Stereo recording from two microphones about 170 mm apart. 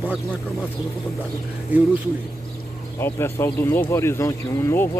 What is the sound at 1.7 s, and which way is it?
Speech, 10° right (ahead or behind).